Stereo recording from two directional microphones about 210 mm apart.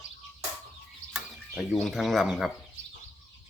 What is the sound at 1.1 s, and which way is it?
Speech, centre (ahead or behind).